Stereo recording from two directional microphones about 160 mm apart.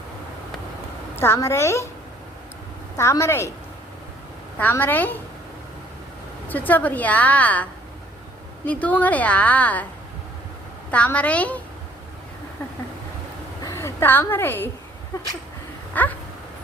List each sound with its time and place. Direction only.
1.1 s a woman's voice: 15° left (ahead or behind)
3.0 s a woman's voice: 15° left (ahead or behind)
4.5 s a woman's voice: 10° left (ahead or behind)
6.5 s a woman's voice: 10° left (ahead or behind)
10.9 s a woman's voice: 10° left (ahead or behind)
13.6 s a sound: 20° left (ahead or behind)
15.9 s a woman's voice: 10° left (ahead or behind)